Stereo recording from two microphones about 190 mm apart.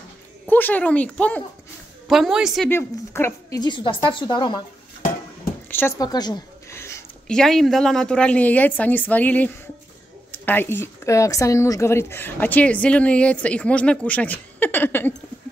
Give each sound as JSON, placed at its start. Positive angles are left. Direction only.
{"t": 0.5, "sound": "a woman's voice", "side_deg": 10}
{"t": 2.7, "sound": "a woman's voice", "side_deg": 15}
{"t": 5.7, "sound": "a sound", "side_deg": 10}
{"t": 7.3, "sound": "a woman's voice", "side_deg": 0}